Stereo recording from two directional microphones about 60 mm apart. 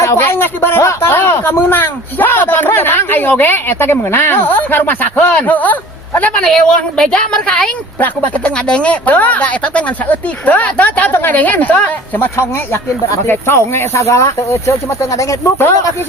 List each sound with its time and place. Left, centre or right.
0.0 s speech: left
0.3 s speech: left
0.8 s speech: left
1.1 s speech: left
6.3 s speech: centre
7.9 s speech: left
8.5 s speech: centre; by 15.4 s left